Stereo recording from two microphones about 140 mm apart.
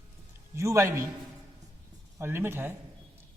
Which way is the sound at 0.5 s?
20° right (ahead or behind).